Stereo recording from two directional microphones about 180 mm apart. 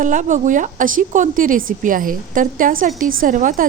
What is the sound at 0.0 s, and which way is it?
A woman's voice, 45° right (ahead or behind).